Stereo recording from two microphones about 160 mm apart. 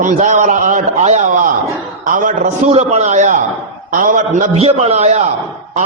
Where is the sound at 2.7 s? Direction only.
45° right (ahead or behind).